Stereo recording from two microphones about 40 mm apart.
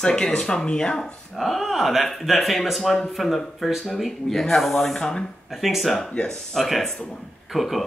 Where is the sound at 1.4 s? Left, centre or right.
Centre.